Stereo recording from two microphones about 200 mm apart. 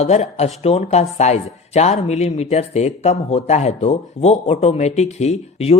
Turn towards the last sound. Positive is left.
turn(degrees=30)  # may be behind; listen again after turning